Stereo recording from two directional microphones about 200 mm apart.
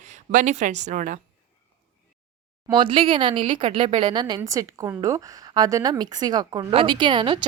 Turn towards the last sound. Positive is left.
turn(degrees=-25)  # may be behind; listen again after turning